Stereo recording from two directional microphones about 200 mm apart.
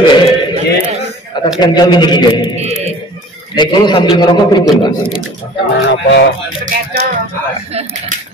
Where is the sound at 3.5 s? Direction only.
20° left (ahead or behind).